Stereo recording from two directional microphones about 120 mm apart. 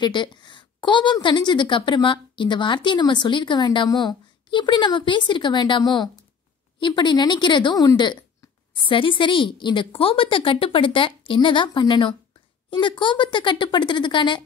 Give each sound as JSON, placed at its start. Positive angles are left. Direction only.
{"t": 0.0, "sound": "a woman's voice", "side_deg": 40}